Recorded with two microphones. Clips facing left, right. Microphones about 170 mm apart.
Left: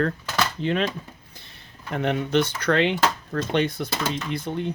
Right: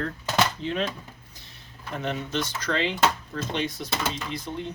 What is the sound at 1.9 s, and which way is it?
Speech, 65° left (ahead or behind).